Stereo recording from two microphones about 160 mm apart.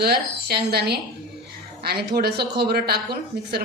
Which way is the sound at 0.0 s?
85° right.